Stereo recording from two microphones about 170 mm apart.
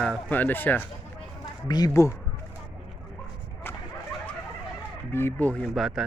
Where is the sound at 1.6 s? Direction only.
25° left (ahead or behind).